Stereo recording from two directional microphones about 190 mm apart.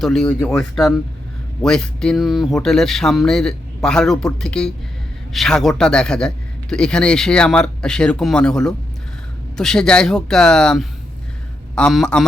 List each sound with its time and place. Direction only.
0.0 s a man's voice: 5° left (ahead or behind)